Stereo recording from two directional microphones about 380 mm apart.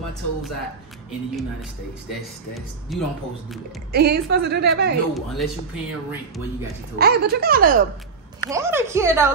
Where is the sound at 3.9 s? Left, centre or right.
Right.